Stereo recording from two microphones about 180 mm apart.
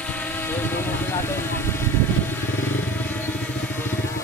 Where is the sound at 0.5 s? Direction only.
10° left (ahead or behind).